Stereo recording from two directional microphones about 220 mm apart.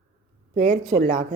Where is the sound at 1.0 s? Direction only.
40° right (ahead or behind).